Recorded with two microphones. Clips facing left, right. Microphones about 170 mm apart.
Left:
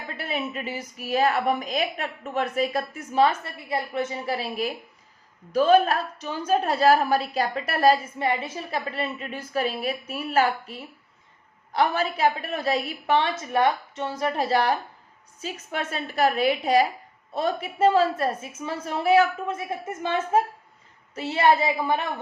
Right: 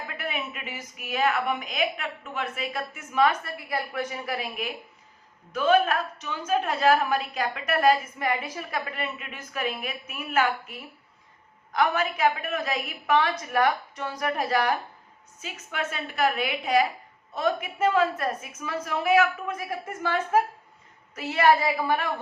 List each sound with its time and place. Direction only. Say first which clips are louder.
0.2 s a woman's voice: left 5 dB; 35° left (ahead or behind)